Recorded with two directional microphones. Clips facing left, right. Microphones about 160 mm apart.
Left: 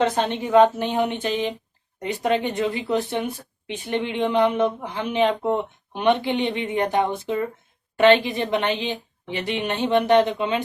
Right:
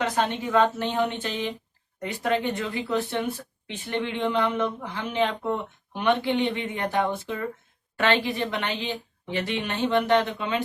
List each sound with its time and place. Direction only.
0.0 s speech: 25° left (ahead or behind)